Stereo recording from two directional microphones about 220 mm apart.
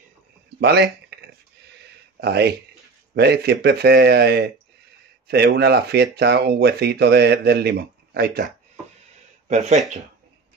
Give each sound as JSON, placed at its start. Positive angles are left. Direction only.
{"t": 0.6, "sound": "a sound", "side_deg": -50}
{"t": 3.2, "sound": "speech", "side_deg": -50}
{"t": 9.5, "sound": "speech", "side_deg": -30}